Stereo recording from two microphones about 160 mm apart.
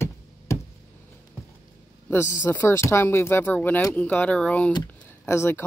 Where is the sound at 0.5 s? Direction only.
20° left (ahead or behind).